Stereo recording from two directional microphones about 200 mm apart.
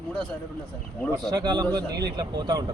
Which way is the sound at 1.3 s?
20° right (ahead or behind).